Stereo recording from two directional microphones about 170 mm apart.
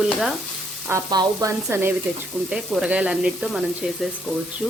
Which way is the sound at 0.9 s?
20° right (ahead or behind).